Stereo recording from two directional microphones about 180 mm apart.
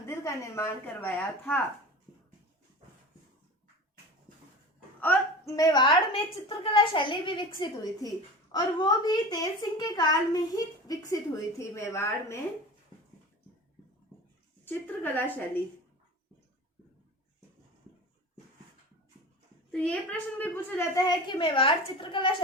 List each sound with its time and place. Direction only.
0.0 s a woman's voice: 15° left (ahead or behind)
4.9 s a woman's voice: 15° left (ahead or behind)
8.5 s a woman's voice: 25° left (ahead or behind)
14.6 s a woman's voice: 10° left (ahead or behind)
19.7 s a woman's voice: 5° left (ahead or behind); by 22.3 s 30° left (ahead or behind)